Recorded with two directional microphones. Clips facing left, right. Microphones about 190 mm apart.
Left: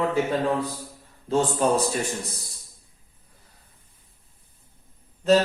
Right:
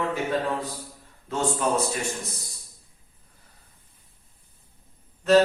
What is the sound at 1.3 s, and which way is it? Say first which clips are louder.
Speech: left 4 dB; 35° left (ahead or behind).